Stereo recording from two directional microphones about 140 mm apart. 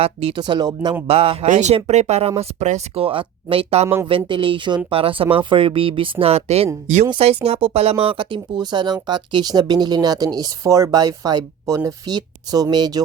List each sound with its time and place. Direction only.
0.0 s speech: 45° right (ahead or behind)
1.0 s speech: 45° right (ahead or behind)
1.5 s speech: 55° right (ahead or behind); by 13.0 s 30° right (ahead or behind)